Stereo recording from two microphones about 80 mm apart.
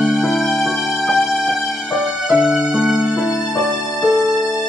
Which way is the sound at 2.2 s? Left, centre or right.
Centre.